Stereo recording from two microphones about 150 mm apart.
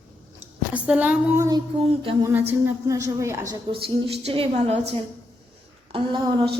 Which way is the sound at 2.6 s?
20° right (ahead or behind).